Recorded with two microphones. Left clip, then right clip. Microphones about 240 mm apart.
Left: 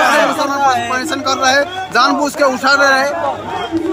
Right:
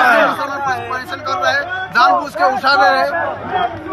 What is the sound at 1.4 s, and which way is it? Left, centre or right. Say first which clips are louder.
Speech: left 3 dB; left.